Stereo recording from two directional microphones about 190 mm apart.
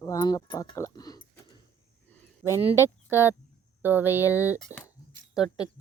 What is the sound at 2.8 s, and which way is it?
Speech, 10° right (ahead or behind).